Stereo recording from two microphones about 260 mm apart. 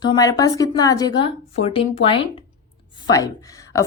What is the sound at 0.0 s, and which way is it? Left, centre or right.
A woman's voice, centre.